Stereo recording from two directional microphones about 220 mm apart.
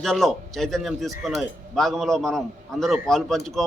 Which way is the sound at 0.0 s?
Centre (ahead or behind).